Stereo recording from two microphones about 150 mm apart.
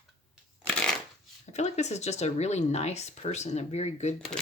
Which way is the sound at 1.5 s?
50° left (ahead or behind).